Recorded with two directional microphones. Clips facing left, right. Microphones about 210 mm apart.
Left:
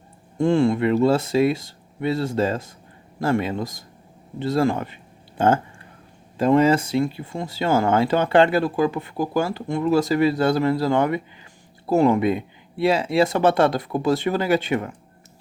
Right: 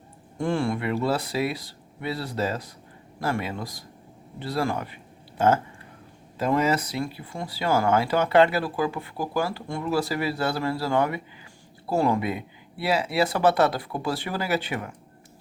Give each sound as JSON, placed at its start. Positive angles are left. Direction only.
{"t": 0.3, "sound": "speech", "side_deg": 25}
{"t": 6.4, "sound": "speech", "side_deg": 30}